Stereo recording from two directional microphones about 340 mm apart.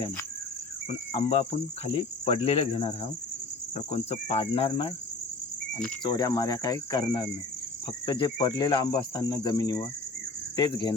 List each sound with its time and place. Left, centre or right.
0.9 s cricket: centre
6.0 s cricket: centre